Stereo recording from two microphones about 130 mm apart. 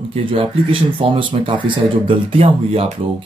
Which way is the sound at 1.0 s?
40° right (ahead or behind).